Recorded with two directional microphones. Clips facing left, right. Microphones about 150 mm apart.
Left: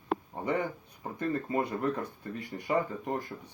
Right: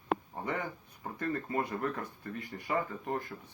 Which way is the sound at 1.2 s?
20° left (ahead or behind).